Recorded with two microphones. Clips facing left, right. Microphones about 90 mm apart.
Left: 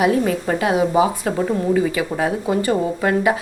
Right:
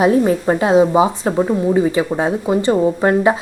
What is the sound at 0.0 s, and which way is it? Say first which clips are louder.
A woman's voice: right 4 dB; 30° right (ahead or behind).